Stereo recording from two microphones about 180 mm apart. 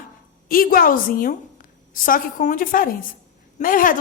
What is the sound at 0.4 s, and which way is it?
A woman's voice, 55° left (ahead or behind).